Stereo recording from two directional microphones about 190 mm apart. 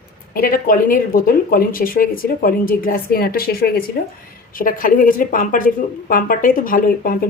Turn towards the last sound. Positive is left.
turn(degrees=45)  # may be behind; listen again after turning